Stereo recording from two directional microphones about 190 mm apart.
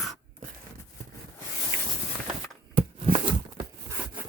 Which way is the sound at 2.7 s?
35° right (ahead or behind).